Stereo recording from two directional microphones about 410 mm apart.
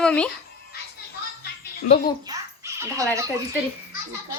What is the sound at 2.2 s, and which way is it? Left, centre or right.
Speech, centre.